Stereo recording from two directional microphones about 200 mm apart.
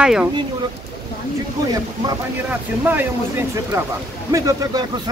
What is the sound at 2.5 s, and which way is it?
Speech, 10° right (ahead or behind).